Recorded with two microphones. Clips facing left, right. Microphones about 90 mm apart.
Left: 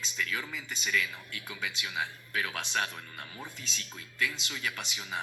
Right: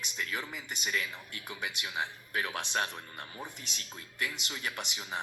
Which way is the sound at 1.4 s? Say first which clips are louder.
Even; 20° right (ahead or behind).